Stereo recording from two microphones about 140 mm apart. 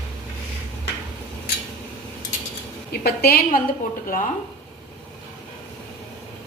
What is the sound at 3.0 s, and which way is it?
Speech, 90° left.